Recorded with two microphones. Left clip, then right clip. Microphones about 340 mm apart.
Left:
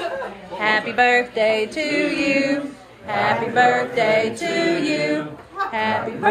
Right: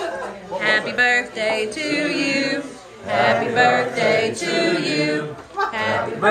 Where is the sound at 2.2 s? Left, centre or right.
Centre.